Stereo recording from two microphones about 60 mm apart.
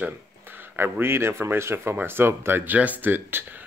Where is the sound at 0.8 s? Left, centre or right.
Right.